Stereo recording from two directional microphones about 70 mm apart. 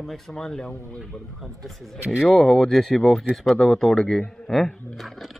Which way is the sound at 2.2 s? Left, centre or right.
Centre.